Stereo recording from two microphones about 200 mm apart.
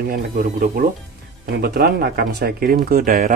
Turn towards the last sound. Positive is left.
turn(degrees=-45)  # may be behind; listen again after turning